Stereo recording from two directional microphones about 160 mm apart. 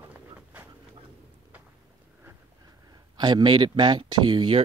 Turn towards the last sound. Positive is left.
turn(degrees=-30)  # may be behind; listen again after turning